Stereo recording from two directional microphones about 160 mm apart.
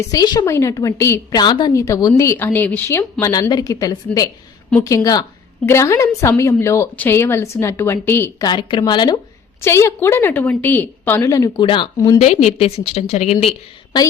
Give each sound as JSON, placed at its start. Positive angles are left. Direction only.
{"t": 0.1, "sound": "a woman's voice", "side_deg": 25}
{"t": 8.4, "sound": "a woman's voice", "side_deg": 30}
{"t": 9.6, "sound": "a woman's voice", "side_deg": 15}
{"t": 12.2, "sound": "a woman's voice", "side_deg": 45}